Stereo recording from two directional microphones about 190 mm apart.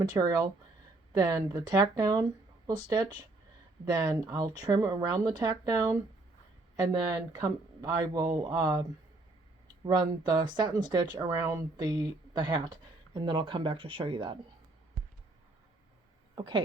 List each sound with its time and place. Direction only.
0.2 s speech: 20° right (ahead or behind)
16.3 s speech: 20° right (ahead or behind)